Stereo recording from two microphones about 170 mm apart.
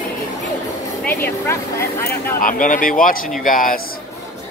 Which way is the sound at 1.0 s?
15° left (ahead or behind).